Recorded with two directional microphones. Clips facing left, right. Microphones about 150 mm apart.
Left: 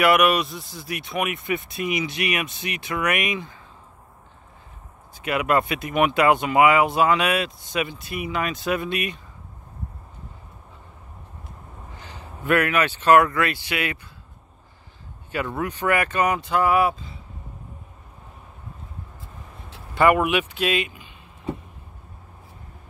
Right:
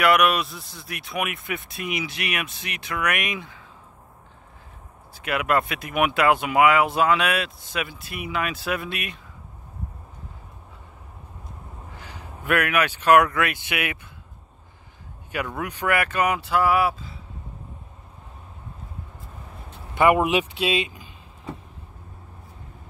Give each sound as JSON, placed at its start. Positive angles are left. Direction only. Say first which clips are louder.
{"t": 0.0, "sound": "speech", "louder": "left 1 dB", "side_deg": 0}
{"t": 5.1, "sound": "speech", "louder": "left 2 dB", "side_deg": 0}
{"t": 12.0, "sound": "speech", "louder": "left 3 dB", "side_deg": -5}
{"t": 15.6, "sound": "speech", "louder": "left 1 dB", "side_deg": -10}
{"t": 19.9, "sound": "vehicle", "louder": "even", "side_deg": -15}
{"t": 20.2, "sound": "speech", "louder": "even", "side_deg": -30}